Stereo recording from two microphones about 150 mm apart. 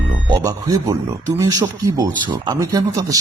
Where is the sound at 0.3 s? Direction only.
25° right (ahead or behind).